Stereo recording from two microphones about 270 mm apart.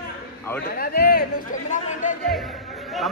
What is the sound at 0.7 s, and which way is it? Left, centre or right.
Speech, left.